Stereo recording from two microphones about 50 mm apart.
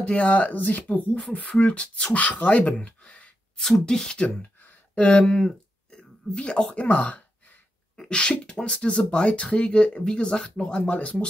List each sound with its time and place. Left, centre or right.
0.0 s speech: left
3.0 s a sound: left
3.8 s speech: centre
4.9 s speech: left
5.2 s speech: centre
5.9 s a sound: left
6.7 s speech: left
7.9 s sneeze: centre
8.5 s speech: centre